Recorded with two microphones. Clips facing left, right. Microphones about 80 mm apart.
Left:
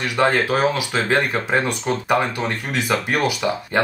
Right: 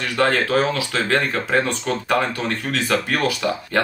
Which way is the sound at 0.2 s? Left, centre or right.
Centre.